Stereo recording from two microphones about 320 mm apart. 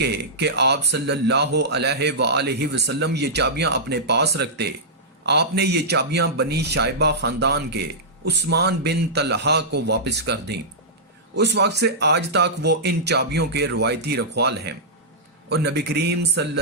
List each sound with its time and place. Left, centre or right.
0.0 s speech: right